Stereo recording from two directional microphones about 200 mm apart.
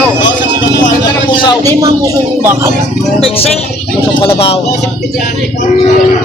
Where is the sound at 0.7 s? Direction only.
20° left (ahead or behind).